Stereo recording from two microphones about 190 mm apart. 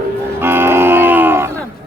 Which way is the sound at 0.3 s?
10° right (ahead or behind).